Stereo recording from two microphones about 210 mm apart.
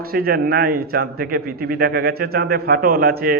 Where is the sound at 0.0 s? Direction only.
45° right (ahead or behind).